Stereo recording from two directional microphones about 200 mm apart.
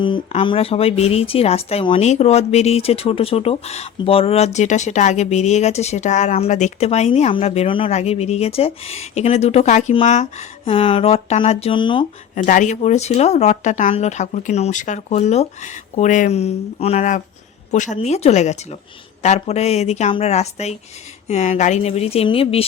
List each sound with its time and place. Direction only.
0.0 s speech: 25° left (ahead or behind)
12.3 s speech: 40° left (ahead or behind)